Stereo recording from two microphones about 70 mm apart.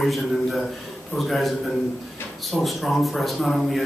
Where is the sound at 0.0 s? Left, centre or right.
Centre.